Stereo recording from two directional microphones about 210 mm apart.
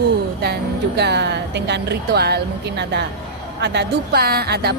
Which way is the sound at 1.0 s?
55° right (ahead or behind).